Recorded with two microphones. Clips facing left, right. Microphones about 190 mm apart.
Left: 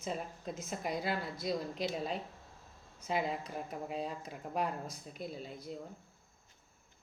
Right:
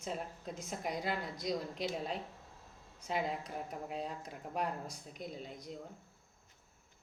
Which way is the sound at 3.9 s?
10° left (ahead or behind).